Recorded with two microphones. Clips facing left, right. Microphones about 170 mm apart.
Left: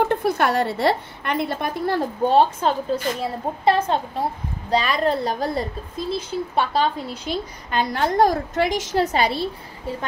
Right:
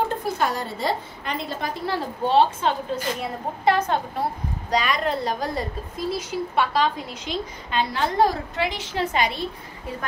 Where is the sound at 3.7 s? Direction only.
30° left (ahead or behind).